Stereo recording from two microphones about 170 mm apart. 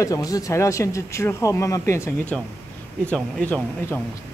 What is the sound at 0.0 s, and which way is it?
Speech, 20° left (ahead or behind).